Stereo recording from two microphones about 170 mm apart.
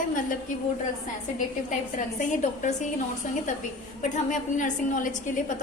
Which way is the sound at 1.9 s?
45° left (ahead or behind).